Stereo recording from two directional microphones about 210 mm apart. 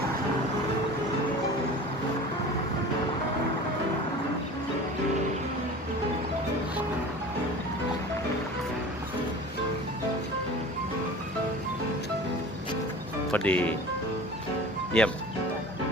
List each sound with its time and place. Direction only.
13.3 s speech: 5° left (ahead or behind)
14.9 s speech: 5° left (ahead or behind)